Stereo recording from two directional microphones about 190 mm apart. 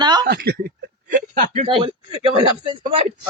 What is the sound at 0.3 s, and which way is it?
Speech, 55° right (ahead or behind).